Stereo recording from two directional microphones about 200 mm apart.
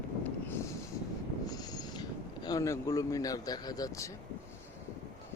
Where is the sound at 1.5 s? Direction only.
20° left (ahead or behind).